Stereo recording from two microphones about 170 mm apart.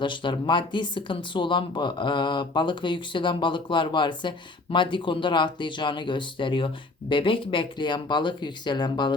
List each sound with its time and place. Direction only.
0.0 s speech: 30° left (ahead or behind)